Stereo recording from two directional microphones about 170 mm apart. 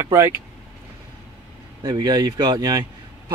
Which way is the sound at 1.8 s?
25° right (ahead or behind).